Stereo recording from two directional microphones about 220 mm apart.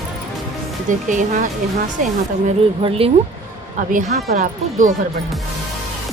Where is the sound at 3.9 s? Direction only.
35° right (ahead or behind).